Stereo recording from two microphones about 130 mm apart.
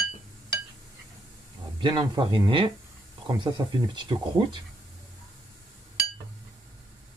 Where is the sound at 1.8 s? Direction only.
35° right (ahead or behind).